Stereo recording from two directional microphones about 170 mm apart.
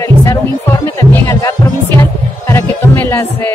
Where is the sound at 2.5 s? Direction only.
15° left (ahead or behind).